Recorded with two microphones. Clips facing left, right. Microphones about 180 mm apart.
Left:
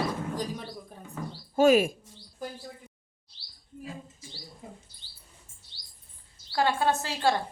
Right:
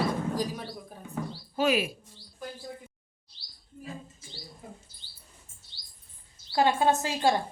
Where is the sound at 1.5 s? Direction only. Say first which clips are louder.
Left 6 dB; 45° left (ahead or behind).